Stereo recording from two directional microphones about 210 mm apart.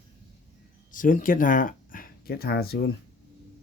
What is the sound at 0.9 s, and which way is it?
Speech, 40° left (ahead or behind).